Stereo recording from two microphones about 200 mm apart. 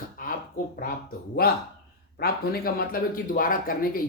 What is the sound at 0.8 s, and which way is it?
Speech, 45° left (ahead or behind).